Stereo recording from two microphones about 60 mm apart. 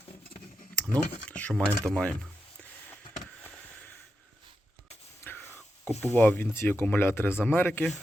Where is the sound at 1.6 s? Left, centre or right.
Centre.